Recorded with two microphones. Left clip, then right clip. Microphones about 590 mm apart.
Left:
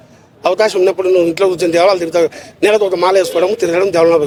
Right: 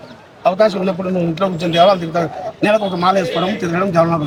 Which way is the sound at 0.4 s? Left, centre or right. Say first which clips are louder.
Left 2 dB; left.